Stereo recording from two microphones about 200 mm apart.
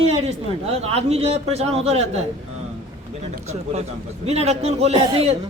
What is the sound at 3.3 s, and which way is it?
A man's voice, 35° right (ahead or behind).